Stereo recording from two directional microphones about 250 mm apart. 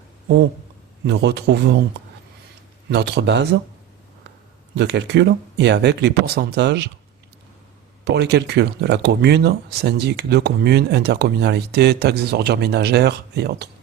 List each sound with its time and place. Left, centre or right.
1.0 s speech: right
2.9 s speech: right
4.7 s speech: right
8.0 s speech: right